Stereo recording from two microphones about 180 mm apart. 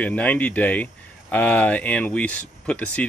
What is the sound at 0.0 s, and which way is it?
Speech, 10° left (ahead or behind).